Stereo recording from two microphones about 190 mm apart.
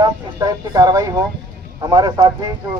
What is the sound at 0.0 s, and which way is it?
Speech, 20° right (ahead or behind).